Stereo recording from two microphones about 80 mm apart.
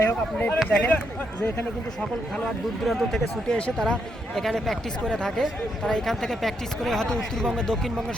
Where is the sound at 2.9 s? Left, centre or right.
Centre.